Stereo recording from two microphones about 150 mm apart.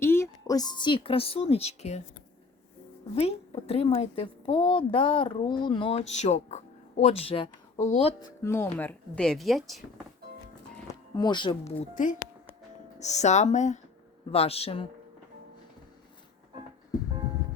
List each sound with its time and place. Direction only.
0.0 s a woman's voice: 15° left (ahead or behind); by 2.0 s 45° left (ahead or behind)
3.2 s a woman's voice: 45° left (ahead or behind)
7.8 s speech: 50° left (ahead or behind)
8.4 s speech: 15° left (ahead or behind); by 9.8 s centre (ahead or behind)
11.2 s a woman's voice: 30° left (ahead or behind)
11.8 s a woman's voice: 60° left (ahead or behind); by 14.8 s 40° left (ahead or behind)